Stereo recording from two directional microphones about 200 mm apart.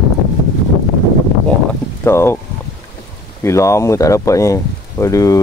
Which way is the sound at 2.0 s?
10° left (ahead or behind).